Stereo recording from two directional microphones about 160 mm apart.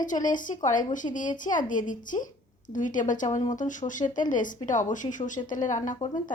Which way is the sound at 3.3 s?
20° left (ahead or behind).